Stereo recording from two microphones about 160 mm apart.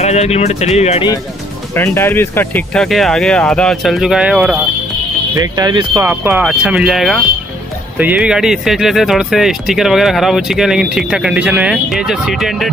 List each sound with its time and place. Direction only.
0.0 s speech: 45° left (ahead or behind)
1.8 s speech: 15° left (ahead or behind); by 4.6 s 10° right (ahead or behind)
5.3 s speech: 25° right (ahead or behind)
6.0 s speech: 10° right (ahead or behind)